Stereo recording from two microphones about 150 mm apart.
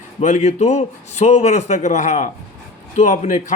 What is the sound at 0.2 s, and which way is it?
A man's voice, 50° left (ahead or behind).